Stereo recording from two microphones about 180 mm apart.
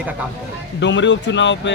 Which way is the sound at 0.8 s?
85° left.